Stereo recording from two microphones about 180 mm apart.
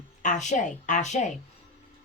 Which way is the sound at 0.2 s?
45° left (ahead or behind).